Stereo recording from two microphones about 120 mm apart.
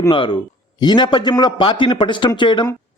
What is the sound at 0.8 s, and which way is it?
A man's voice, 35° left (ahead or behind).